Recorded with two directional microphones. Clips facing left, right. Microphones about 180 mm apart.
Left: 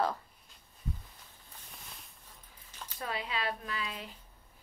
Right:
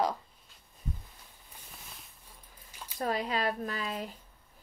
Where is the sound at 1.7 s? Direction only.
Centre (ahead or behind).